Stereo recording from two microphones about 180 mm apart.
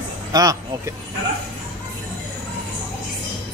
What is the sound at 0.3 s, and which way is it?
Speech, 20° right (ahead or behind).